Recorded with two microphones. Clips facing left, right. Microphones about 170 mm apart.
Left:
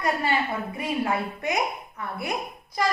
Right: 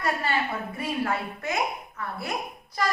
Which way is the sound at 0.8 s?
15° left (ahead or behind).